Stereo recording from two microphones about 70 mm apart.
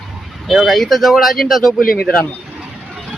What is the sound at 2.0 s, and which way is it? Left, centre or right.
Speech, centre.